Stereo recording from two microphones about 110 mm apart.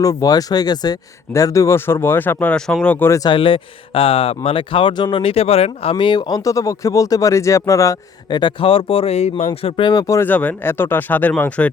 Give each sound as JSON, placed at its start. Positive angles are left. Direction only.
{"t": 0.0, "sound": "speech", "side_deg": 35}
{"t": 3.2, "sound": "speech", "side_deg": 50}
{"t": 5.1, "sound": "speech", "side_deg": 60}
{"t": 8.3, "sound": "speech", "side_deg": 45}
{"t": 9.6, "sound": "speech", "side_deg": 55}
{"t": 9.9, "sound": "speech", "side_deg": 35}
{"t": 10.2, "sound": "speech", "side_deg": 15}